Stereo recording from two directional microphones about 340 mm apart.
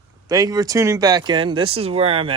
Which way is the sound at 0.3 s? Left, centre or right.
Centre.